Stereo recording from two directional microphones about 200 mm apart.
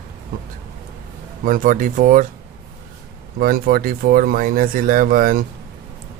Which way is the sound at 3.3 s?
50° right (ahead or behind).